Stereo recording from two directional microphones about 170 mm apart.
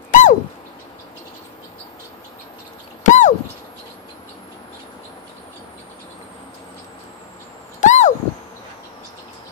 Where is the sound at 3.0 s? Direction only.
45° left (ahead or behind).